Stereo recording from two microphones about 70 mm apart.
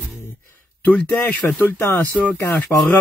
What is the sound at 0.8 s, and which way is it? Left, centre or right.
Speech, left.